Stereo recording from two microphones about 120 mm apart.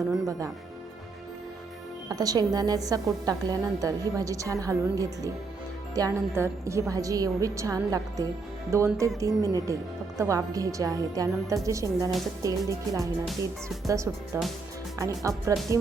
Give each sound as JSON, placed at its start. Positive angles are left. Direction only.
{"t": 0.3, "sound": "speech", "side_deg": -30}
{"t": 2.0, "sound": "a woman's voice", "side_deg": -30}